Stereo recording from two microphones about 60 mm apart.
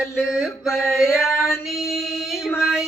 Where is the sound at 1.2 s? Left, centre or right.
Left.